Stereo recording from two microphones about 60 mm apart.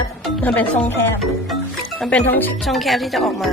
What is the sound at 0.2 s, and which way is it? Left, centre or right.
Music, centre.